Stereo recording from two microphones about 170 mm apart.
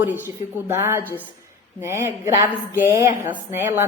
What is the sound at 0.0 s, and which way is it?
A woman's voice, 15° right (ahead or behind).